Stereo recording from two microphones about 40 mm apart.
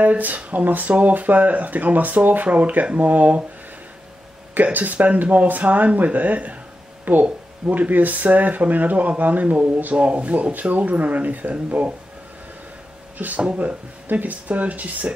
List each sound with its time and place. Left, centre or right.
0.0 s speech: right
4.7 s speech: right
9.9 s speech: right
13.2 s speech: right